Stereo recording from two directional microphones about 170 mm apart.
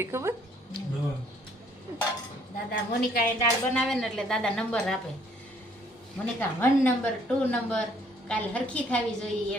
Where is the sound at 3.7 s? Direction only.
5° left (ahead or behind).